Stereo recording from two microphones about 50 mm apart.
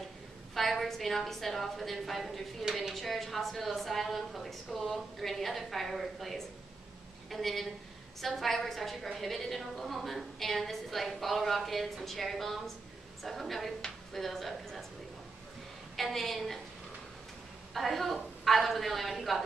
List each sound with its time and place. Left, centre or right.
0.6 s a woman's voice: centre
16.0 s a woman's voice: centre
17.7 s a woman's voice: centre